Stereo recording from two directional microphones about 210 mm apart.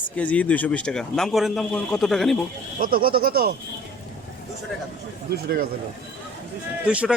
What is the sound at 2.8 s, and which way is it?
Speech, 45° right (ahead or behind).